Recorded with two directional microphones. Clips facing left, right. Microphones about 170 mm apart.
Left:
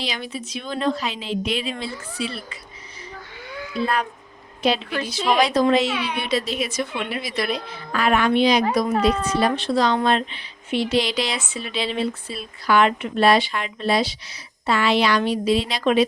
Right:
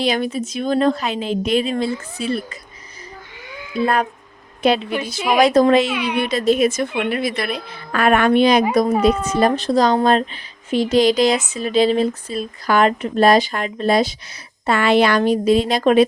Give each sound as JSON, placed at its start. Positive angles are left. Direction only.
{"t": 0.0, "sound": "speech", "side_deg": -50}
{"t": 3.8, "sound": "speech", "side_deg": -50}
{"t": 5.9, "sound": "a woman's voice", "side_deg": -15}
{"t": 6.2, "sound": "speech", "side_deg": -50}